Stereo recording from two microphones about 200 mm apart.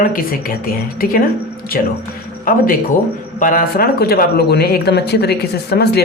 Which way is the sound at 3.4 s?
40° left (ahead or behind).